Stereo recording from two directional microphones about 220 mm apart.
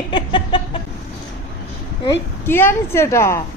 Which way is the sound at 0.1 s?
20° left (ahead or behind).